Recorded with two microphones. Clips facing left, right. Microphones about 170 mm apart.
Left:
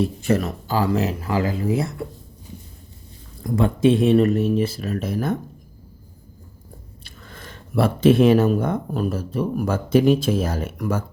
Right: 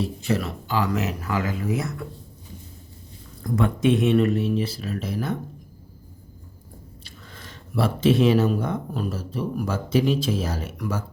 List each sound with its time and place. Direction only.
0.0 s speech: 50° left (ahead or behind); by 2.0 s 30° left (ahead or behind)
3.4 s speech: 30° left (ahead or behind); by 5.4 s 50° left (ahead or behind)
7.0 s speech: 50° left (ahead or behind)